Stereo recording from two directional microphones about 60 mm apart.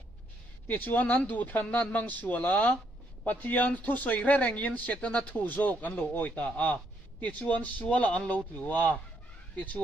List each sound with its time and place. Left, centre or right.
0.7 s speech: left